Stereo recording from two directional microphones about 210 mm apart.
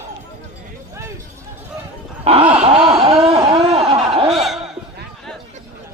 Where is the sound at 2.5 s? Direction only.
30° right (ahead or behind).